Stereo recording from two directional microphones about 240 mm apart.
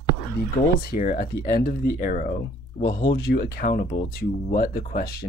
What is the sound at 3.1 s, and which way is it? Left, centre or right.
Speech, left.